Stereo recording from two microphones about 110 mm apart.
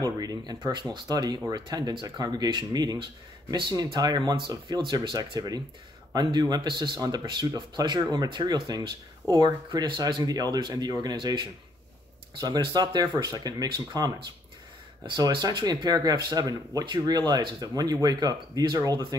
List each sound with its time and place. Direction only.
0.0 s speech: 35° right (ahead or behind)